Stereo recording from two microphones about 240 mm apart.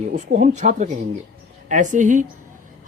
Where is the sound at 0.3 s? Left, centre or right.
Right.